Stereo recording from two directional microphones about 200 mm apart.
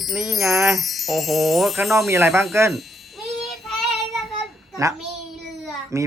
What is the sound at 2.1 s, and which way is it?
Speech, 15° right (ahead or behind).